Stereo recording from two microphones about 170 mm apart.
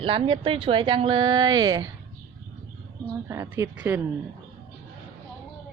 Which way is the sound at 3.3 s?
15° right (ahead or behind).